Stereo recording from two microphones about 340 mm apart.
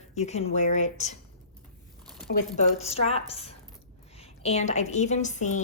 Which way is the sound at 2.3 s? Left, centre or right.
Left.